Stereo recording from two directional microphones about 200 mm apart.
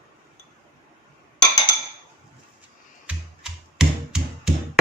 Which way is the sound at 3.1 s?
5° right (ahead or behind).